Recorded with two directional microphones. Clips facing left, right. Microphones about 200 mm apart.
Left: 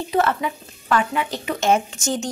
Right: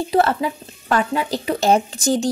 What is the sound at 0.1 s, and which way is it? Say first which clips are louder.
Speech: right 2 dB; 35° right (ahead or behind).